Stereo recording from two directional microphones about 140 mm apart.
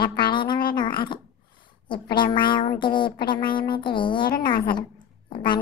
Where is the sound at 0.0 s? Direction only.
35° left (ahead or behind).